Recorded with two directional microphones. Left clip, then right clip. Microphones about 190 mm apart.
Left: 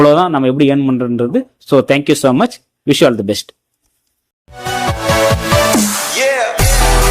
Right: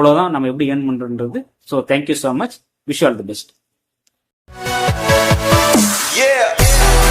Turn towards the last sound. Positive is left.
turn(degrees=0)  # may be behind; listen again after turning